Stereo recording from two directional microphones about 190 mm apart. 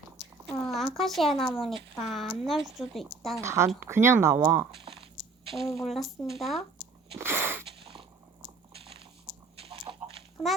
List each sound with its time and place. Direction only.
0.4 s speech: 5° left (ahead or behind)
3.4 s speech: 15° right (ahead or behind)
4.7 s speech: 25° right (ahead or behind)
5.7 s speech: centre (ahead or behind)
7.2 s a sound: 10° right (ahead or behind)
8.7 s biting: 30° right (ahead or behind)
9.6 s a sound: 30° right (ahead or behind)